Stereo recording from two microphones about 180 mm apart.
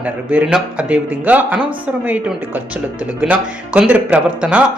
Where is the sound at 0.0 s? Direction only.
10° right (ahead or behind).